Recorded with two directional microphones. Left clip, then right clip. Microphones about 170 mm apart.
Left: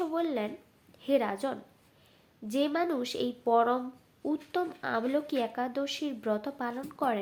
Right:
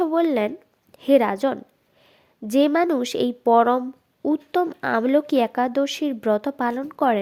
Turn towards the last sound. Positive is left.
turn(degrees=-50)  # may be behind; listen again after turning